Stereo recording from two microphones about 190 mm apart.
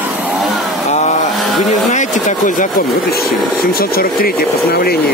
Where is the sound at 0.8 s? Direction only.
35° left (ahead or behind).